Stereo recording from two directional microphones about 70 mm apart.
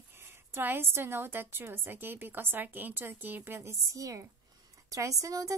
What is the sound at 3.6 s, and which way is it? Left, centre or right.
A woman's voice, right.